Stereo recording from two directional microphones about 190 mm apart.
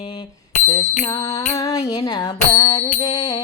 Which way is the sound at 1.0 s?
20° left (ahead or behind).